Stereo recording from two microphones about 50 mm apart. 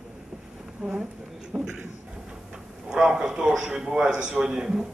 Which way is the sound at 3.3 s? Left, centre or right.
Centre.